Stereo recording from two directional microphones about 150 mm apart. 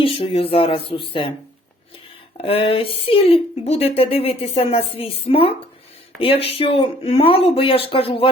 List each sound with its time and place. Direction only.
0.0 s speech: 40° left (ahead or behind)
2.4 s speech: 40° left (ahead or behind)